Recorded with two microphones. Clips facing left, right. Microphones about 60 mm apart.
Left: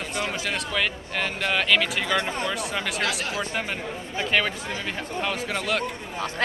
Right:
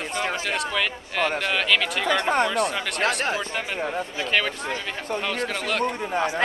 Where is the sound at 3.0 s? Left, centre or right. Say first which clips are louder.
Right 4 dB; right.